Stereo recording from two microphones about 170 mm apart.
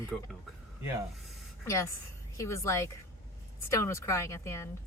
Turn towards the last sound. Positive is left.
turn(degrees=15)  # may be behind; listen again after turning